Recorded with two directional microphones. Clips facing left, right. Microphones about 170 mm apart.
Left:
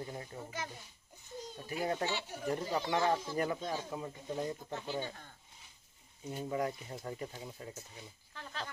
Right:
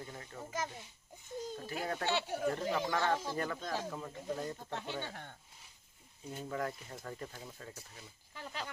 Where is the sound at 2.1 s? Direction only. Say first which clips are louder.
Right 4 dB; 60° right (ahead or behind).